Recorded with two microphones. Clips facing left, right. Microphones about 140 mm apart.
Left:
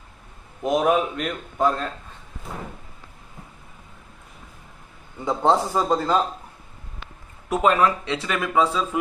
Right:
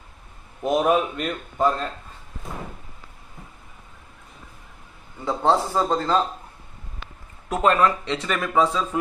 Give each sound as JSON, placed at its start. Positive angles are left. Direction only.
{"t": 0.6, "sound": "speech", "side_deg": 0}
{"t": 5.2, "sound": "a man's voice", "side_deg": 15}
{"t": 7.4, "sound": "speech", "side_deg": 5}